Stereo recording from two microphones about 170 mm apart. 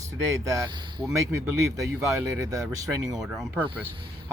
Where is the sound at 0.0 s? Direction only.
20° right (ahead or behind).